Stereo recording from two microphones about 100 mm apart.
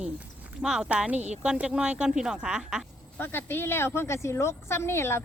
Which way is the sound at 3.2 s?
20° left (ahead or behind).